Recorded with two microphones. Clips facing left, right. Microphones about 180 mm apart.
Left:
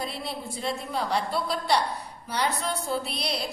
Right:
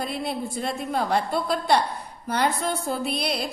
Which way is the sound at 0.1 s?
50° right (ahead or behind).